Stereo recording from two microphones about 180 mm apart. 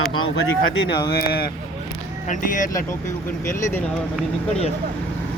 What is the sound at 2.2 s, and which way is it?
Speech, 45° left (ahead or behind).